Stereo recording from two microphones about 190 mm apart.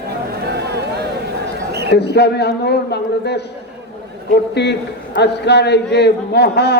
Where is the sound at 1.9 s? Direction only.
60° left (ahead or behind).